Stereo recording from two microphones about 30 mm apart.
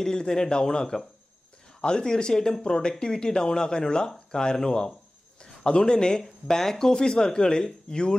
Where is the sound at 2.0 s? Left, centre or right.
Centre.